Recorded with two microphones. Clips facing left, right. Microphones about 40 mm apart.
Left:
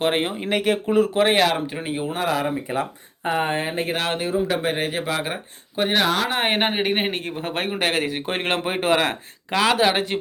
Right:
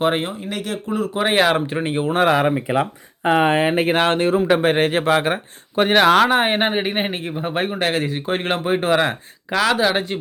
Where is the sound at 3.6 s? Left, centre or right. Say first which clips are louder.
Right 8 dB; right.